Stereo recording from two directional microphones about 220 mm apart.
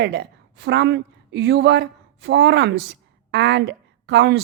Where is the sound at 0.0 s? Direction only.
50° right (ahead or behind).